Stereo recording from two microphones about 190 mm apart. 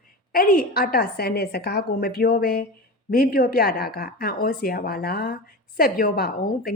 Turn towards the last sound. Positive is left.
turn(degrees=55)  # may be behind; listen again after turning